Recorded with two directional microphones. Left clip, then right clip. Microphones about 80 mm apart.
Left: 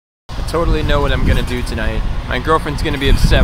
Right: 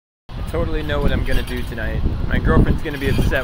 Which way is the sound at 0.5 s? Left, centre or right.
Left.